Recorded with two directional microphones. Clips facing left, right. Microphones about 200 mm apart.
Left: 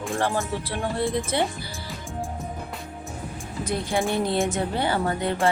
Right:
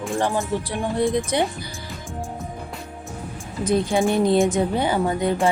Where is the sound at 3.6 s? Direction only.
20° right (ahead or behind).